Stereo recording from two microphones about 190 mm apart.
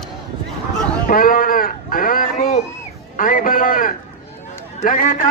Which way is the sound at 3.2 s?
45° left (ahead or behind).